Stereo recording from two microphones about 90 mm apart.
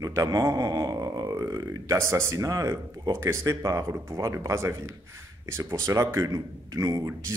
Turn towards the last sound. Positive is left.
turn(degrees=-40)  # may be behind; listen again after turning